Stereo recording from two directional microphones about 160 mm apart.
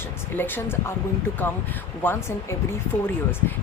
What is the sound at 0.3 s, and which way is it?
Speech, 10° left (ahead or behind).